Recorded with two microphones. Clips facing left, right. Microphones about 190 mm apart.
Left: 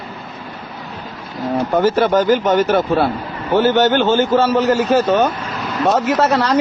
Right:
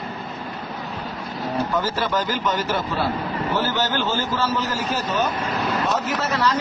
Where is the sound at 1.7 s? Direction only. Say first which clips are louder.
Left 13 dB; 60° left (ahead or behind).